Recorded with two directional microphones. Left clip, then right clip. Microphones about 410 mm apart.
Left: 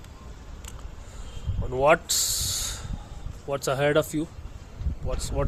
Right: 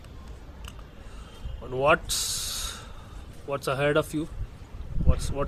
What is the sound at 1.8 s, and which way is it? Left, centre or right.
Speech, centre.